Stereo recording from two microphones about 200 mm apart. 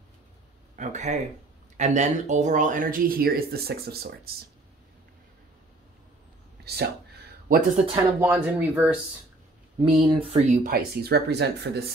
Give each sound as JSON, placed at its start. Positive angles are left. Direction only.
{"t": 0.7, "sound": "speech", "side_deg": -35}
{"t": 6.6, "sound": "speech", "side_deg": -55}
{"t": 8.2, "sound": "speech", "side_deg": -5}
{"t": 9.9, "sound": "speech", "side_deg": -25}